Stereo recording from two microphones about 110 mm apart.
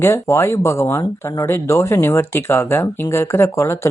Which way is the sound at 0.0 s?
25° left (ahead or behind).